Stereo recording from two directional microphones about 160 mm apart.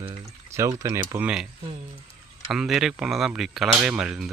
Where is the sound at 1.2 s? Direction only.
5° right (ahead or behind).